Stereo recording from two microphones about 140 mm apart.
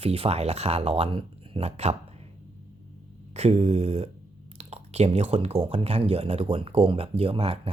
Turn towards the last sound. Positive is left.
turn(degrees=-45)  # may be behind; listen again after turning